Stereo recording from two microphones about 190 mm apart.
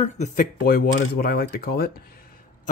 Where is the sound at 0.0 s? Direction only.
40° left (ahead or behind).